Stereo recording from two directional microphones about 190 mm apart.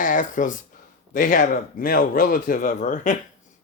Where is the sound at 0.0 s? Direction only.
45° left (ahead or behind).